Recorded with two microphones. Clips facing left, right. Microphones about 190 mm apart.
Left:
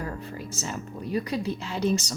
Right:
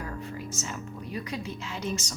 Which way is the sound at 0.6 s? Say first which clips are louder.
Left 3 dB; 35° left (ahead or behind).